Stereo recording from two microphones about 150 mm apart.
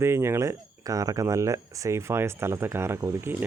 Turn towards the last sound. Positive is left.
turn(degrees=-15)  # may be behind; listen again after turning